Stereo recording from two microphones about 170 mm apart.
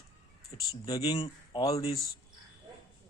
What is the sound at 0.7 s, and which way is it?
Speech, 20° left (ahead or behind).